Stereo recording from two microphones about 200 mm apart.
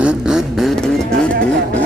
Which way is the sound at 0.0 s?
5° right (ahead or behind).